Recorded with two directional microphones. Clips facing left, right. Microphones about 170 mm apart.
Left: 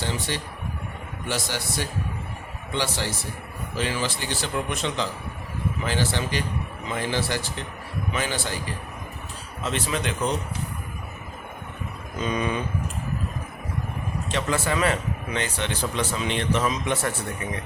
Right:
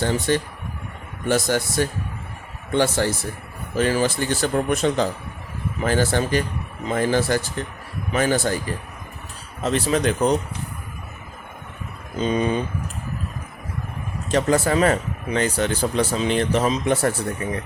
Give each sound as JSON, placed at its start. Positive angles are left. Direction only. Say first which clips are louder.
{"t": 0.0, "sound": "speech", "louder": "right 8 dB", "side_deg": -50}
{"t": 12.2, "sound": "speech", "louder": "right 5 dB", "side_deg": -30}
{"t": 14.3, "sound": "speech", "louder": "right 7 dB", "side_deg": -40}